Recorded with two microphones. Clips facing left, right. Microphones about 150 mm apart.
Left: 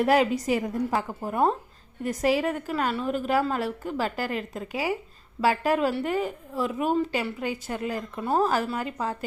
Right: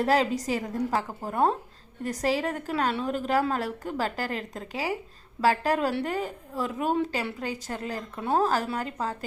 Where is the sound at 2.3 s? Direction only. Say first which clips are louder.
Left 3 dB; 40° right (ahead or behind).